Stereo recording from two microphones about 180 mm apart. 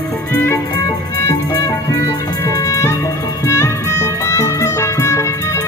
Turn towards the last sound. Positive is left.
turn(degrees=15)  # may be behind; listen again after turning